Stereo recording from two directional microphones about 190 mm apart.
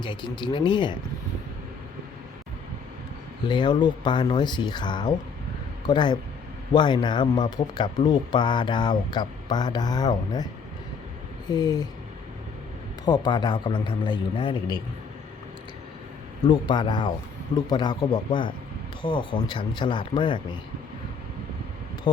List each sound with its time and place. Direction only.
0.0 s speech: 25° left (ahead or behind)
3.4 s speech: 25° left (ahead or behind)
13.1 s speech: 25° left (ahead or behind)
16.4 s speech: 25° left (ahead or behind)
22.1 s a sound: 25° left (ahead or behind)